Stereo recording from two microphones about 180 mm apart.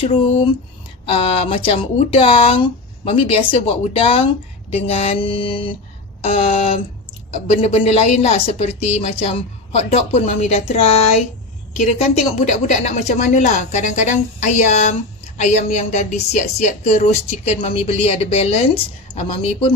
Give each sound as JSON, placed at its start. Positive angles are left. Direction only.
{"t": 1.0, "sound": "speech", "side_deg": 35}